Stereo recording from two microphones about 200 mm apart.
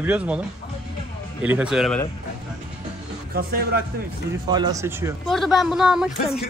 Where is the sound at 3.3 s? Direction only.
45° right (ahead or behind).